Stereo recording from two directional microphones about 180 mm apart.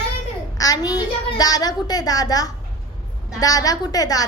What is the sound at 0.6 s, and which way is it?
A woman's voice, 20° left (ahead or behind).